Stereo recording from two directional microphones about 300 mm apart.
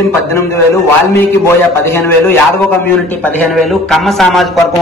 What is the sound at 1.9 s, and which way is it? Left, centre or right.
A man's voice, centre.